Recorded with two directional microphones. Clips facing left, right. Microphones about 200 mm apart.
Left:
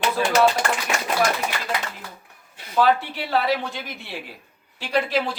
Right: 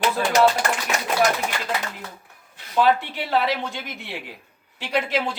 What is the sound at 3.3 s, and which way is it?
Speech, 20° right (ahead or behind).